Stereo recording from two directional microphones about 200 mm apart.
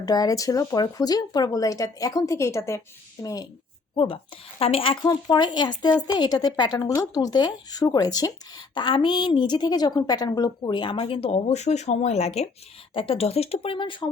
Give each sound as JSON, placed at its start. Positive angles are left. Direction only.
{"t": 0.0, "sound": "a woman's voice", "side_deg": 20}